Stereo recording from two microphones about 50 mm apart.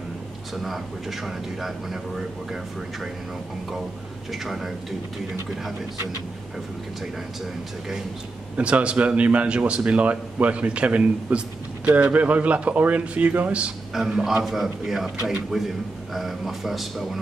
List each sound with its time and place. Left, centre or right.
0.6 s a man's voice: centre
4.3 s a man's voice: centre
8.5 s a man's voice: right
13.9 s a man's voice: centre
14.4 s a man's voice: centre